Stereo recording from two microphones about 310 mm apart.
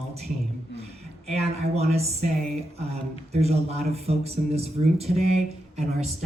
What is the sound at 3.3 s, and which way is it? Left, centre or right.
Speech, centre.